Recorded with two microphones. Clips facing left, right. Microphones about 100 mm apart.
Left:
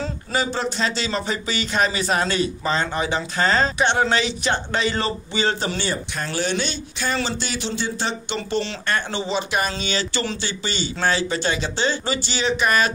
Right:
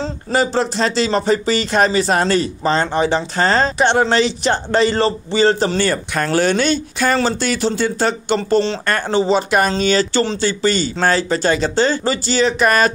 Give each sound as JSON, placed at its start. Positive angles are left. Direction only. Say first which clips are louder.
{"t": 0.3, "sound": "speech", "louder": "right 7 dB", "side_deg": -40}
{"t": 5.9, "sound": "speech", "louder": "right 8 dB", "side_deg": -55}